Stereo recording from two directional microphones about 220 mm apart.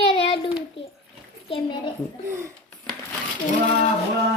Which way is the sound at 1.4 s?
25° left (ahead or behind).